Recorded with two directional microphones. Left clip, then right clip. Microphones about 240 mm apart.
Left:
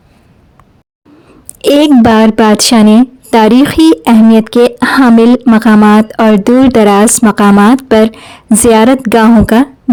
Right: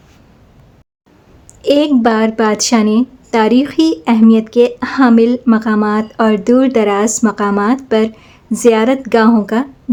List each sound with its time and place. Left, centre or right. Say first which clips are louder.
1.6 s a woman's voice: left 5 dB; left